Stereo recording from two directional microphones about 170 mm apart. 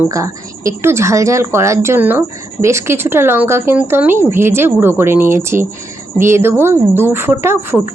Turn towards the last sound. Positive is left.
turn(degrees=-15)  # may be behind; listen again after turning